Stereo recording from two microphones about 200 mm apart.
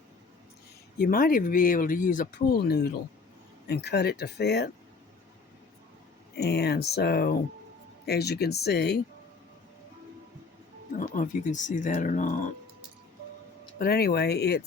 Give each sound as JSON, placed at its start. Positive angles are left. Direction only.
{"t": 0.9, "sound": "speech", "side_deg": 45}
{"t": 6.3, "sound": "speech", "side_deg": 55}
{"t": 10.9, "sound": "speech", "side_deg": 40}
{"t": 13.7, "sound": "speech", "side_deg": 50}